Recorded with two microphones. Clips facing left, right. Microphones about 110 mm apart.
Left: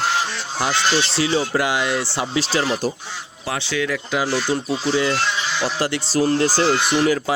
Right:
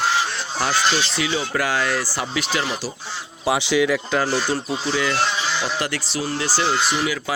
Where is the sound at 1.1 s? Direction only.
30° left (ahead or behind).